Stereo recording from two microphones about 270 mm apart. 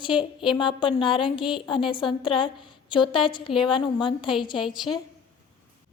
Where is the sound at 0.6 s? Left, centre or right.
Centre.